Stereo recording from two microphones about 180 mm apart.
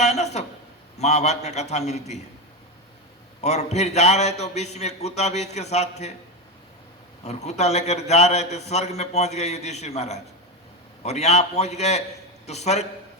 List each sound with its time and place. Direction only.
0.0 s a sound: 40° left (ahead or behind)
0.9 s a man's voice: 40° left (ahead or behind)
3.4 s a man's voice: 40° left (ahead or behind)
7.3 s a man's voice: 40° left (ahead or behind)